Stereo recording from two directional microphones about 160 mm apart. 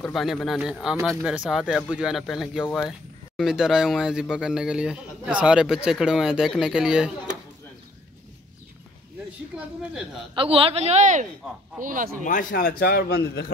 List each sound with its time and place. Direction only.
0.0 s speech: centre (ahead or behind)
9.5 s speech: 10° right (ahead or behind)
10.3 s speech: 35° right (ahead or behind); by 12.1 s 55° right (ahead or behind)
12.3 s a man's voice: 55° left (ahead or behind); by 13.5 s 75° left (ahead or behind)